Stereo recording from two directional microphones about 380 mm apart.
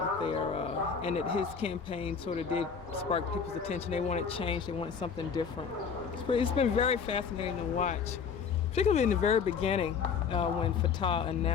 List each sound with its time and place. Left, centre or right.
0.2 s speech: centre
6.2 s speech: centre